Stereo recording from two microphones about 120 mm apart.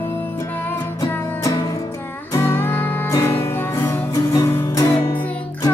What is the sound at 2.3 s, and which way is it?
Music, 20° left (ahead or behind).